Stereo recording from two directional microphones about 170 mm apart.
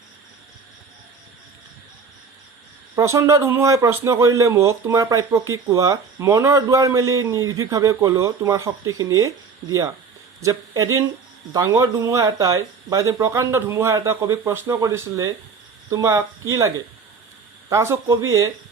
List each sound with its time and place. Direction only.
2.9 s speech: 15° right (ahead or behind)